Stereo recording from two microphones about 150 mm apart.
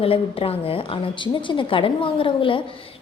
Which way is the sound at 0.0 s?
40° left (ahead or behind).